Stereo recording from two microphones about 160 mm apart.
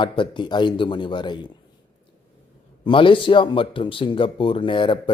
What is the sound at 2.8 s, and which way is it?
A man's voice, 30° left (ahead or behind).